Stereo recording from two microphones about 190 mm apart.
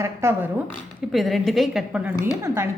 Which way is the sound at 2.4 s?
15° right (ahead or behind).